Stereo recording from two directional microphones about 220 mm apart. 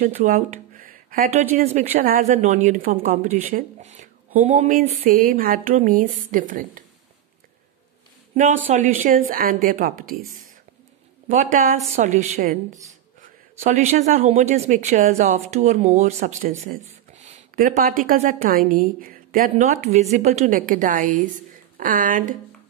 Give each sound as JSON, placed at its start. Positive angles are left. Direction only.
{"t": 0.0, "sound": "speech", "side_deg": -35}
{"t": 8.6, "sound": "speech", "side_deg": -35}
{"t": 11.2, "sound": "speech", "side_deg": -35}
{"t": 13.6, "sound": "speech", "side_deg": -30}